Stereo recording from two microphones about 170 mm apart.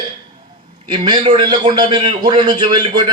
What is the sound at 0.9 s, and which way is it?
A man's voice, 25° right (ahead or behind).